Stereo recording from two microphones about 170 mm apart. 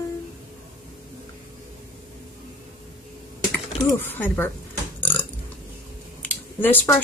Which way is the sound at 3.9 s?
10° left (ahead or behind).